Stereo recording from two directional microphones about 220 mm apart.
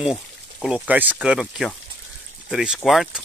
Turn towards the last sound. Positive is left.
turn(degrees=0)  # may be behind; listen again after turning